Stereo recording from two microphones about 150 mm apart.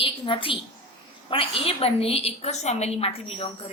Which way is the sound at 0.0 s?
35° left (ahead or behind).